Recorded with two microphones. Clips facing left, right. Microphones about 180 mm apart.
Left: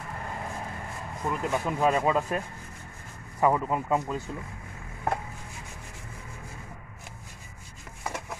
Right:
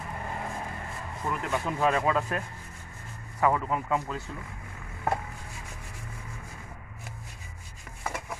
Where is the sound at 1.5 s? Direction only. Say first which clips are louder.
Left 1 dB; 10° left (ahead or behind).